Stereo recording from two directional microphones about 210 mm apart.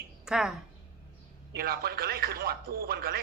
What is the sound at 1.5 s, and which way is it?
Speech, 45° right (ahead or behind).